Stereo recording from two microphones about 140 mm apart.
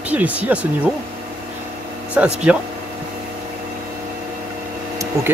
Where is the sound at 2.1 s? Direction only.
10° right (ahead or behind).